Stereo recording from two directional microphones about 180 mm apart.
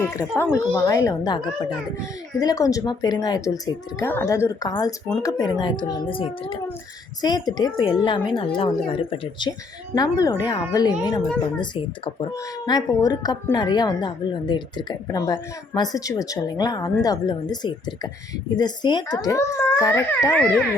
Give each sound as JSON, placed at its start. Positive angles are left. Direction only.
{"t": 0.0, "sound": "a woman's voice", "side_deg": 15}
{"t": 2.4, "sound": "a woman's voice", "side_deg": 20}